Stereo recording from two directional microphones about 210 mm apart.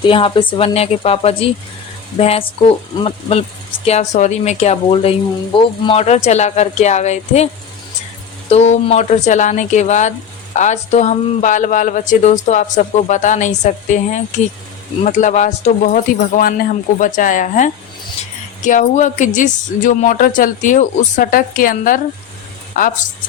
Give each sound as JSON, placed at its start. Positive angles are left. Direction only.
{"t": 0.0, "sound": "speech", "side_deg": 25}